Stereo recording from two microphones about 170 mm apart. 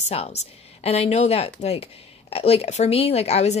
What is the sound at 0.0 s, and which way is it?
Speech, 40° left (ahead or behind).